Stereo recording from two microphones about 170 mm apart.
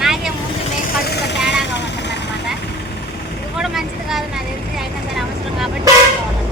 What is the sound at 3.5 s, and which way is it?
Speech, centre (ahead or behind).